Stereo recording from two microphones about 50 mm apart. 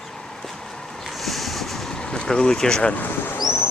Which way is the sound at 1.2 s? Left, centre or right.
Centre.